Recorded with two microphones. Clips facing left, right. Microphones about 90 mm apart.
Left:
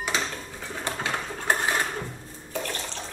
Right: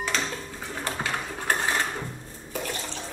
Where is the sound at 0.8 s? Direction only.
20° left (ahead or behind).